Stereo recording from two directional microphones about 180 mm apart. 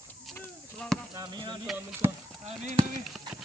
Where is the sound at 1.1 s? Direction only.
25° right (ahead or behind).